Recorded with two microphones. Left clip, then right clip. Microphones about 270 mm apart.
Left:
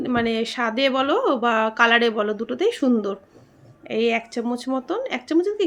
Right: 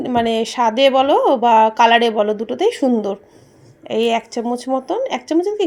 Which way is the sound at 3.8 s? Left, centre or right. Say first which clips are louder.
Right 4 dB; centre.